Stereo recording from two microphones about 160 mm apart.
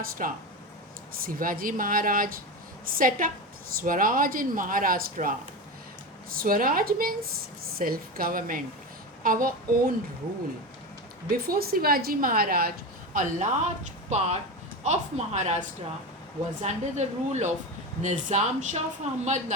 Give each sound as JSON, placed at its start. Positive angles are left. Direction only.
{"t": 0.2, "sound": "a woman's voice", "side_deg": -50}
{"t": 1.1, "sound": "a woman's voice", "side_deg": -65}
{"t": 6.3, "sound": "a woman's voice", "side_deg": -60}
{"t": 11.3, "sound": "a woman's voice", "side_deg": -65}
{"t": 13.1, "sound": "a woman's voice", "side_deg": -50}
{"t": 16.6, "sound": "a woman's voice", "side_deg": -45}